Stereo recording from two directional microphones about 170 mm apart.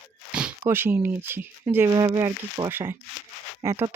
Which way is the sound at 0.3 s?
10° right (ahead or behind).